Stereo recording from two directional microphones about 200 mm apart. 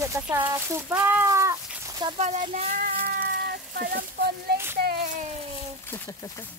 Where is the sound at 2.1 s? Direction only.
35° right (ahead or behind); by 3.9 s 50° right (ahead or behind).